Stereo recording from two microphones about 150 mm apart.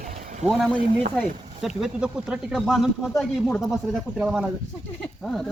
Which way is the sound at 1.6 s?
5° right (ahead or behind).